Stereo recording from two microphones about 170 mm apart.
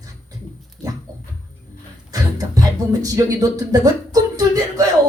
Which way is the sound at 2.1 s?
20° right (ahead or behind).